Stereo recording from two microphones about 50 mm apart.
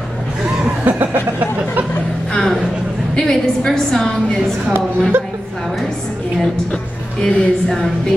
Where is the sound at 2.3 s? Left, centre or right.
Centre.